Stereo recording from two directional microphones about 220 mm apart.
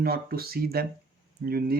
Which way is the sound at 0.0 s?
45° right (ahead or behind).